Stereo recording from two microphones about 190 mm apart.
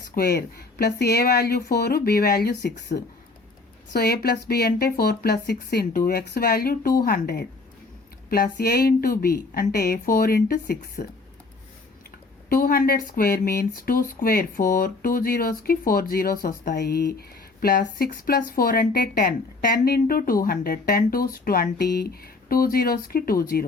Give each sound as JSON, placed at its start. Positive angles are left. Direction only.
{"t": 0.1, "sound": "a woman's voice", "side_deg": 55}
{"t": 12.5, "sound": "speech", "side_deg": 50}